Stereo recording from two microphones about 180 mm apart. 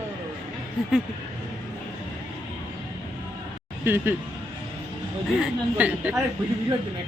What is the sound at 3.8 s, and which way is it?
Speech, 10° right (ahead or behind).